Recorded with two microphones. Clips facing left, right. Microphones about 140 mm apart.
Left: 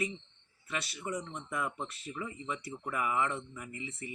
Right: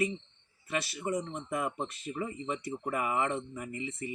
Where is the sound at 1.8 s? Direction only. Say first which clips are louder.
Right 4 dB; 40° right (ahead or behind).